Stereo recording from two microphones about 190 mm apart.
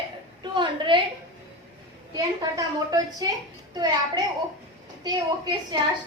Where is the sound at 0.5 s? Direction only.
25° right (ahead or behind).